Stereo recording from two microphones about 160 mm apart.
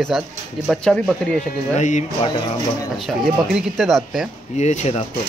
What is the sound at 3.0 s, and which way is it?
Speech, centre (ahead or behind).